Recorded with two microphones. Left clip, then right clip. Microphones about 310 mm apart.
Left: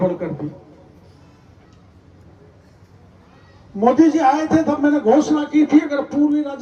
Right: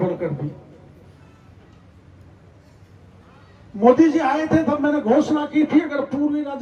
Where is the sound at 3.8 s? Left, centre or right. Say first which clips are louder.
Even; left.